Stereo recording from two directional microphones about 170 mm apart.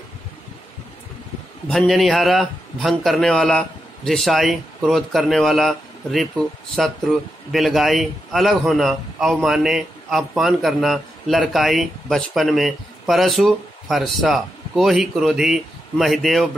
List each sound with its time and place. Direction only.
1.7 s a man's voice: 5° left (ahead or behind)